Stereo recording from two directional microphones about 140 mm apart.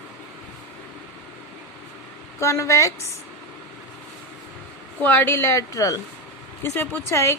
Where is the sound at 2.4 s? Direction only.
20° left (ahead or behind).